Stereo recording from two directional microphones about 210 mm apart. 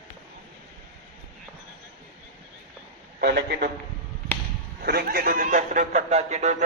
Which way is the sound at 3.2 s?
50° right (ahead or behind).